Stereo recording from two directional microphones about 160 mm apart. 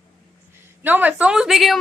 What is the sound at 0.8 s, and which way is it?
A woman's voice, 10° right (ahead or behind).